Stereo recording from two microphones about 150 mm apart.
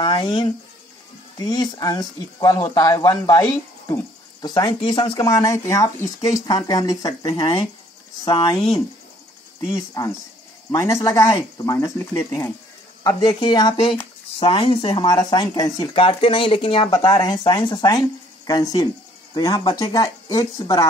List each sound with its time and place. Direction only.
0.0 s speech: 35° left (ahead or behind)
9.7 s speech: 20° left (ahead or behind)